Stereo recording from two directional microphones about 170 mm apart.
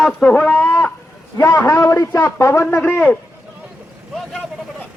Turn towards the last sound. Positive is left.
turn(degrees=10)  # may be behind; listen again after turning